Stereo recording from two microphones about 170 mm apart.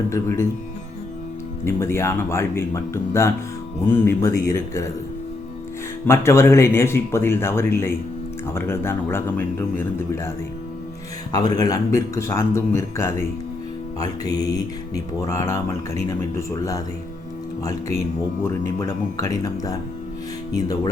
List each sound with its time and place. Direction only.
0.1 s speech: 15° left (ahead or behind)
1.6 s speech: 15° left (ahead or behind)
6.1 s speech: 15° left (ahead or behind)
11.3 s speech: 20° left (ahead or behind)